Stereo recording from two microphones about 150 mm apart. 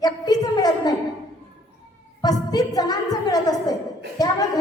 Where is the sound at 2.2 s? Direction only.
25° left (ahead or behind).